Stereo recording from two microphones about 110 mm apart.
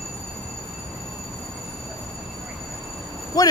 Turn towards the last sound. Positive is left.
turn(degrees=35)  # may be behind; listen again after turning